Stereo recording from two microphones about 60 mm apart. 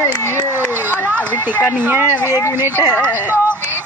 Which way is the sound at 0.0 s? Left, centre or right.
Left.